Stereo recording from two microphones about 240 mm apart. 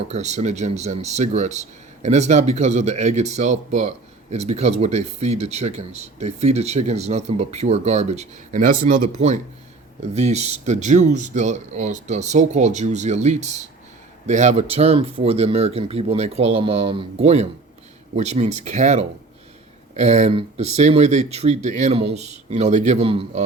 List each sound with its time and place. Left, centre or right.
0.1 s speech: right